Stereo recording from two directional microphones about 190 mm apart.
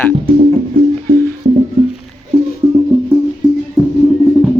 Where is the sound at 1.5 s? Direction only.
40° right (ahead or behind).